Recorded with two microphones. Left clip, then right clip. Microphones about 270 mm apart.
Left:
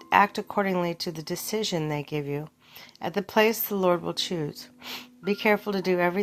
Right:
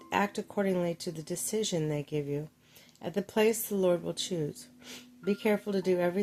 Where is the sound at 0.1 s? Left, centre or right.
Centre.